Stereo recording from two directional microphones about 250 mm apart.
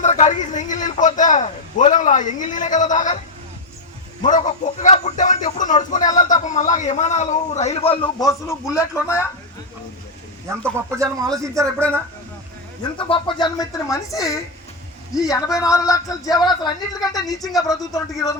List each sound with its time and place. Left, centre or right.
0.0 s a sound: left
4.2 s a man's voice: left; by 8.5 s centre
10.6 s speech: centre
13.0 s speech: centre